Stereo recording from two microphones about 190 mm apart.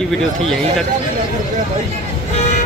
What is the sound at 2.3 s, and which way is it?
Vehicle, 35° left (ahead or behind).